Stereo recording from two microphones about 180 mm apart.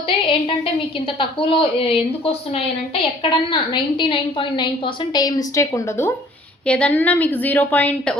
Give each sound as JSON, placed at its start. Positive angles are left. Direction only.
{"t": 0.1, "sound": "a woman's voice", "side_deg": 30}